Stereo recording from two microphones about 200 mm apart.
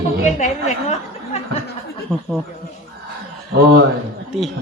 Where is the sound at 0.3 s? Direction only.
35° left (ahead or behind).